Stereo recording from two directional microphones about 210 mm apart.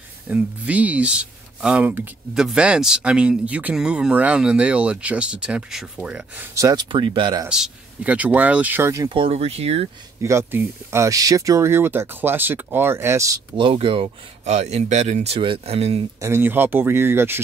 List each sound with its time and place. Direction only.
0.3 s speech: 5° right (ahead or behind); by 7.4 s 25° right (ahead or behind)
7.4 s speech: 5° right (ahead or behind)
9.2 s speech: 30° right (ahead or behind)
10.2 s speech: 10° right (ahead or behind); by 16.0 s 30° right (ahead or behind)
16.2 s speech: 10° right (ahead or behind)